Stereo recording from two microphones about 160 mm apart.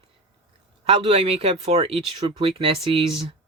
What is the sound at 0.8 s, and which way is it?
Speech, 35° right (ahead or behind).